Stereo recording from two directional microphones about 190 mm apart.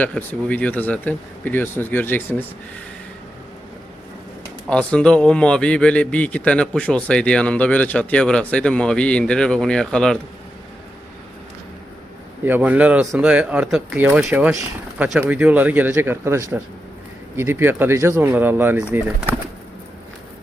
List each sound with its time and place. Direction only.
0.0 s speech: 10° left (ahead or behind)
4.7 s a man's voice: 5° left (ahead or behind)
12.5 s speech: 10° right (ahead or behind)